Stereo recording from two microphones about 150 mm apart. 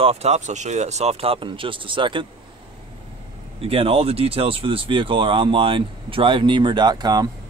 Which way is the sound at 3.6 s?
40° right (ahead or behind).